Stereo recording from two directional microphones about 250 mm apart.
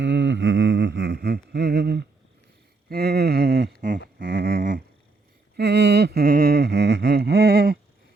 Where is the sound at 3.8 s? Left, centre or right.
Right.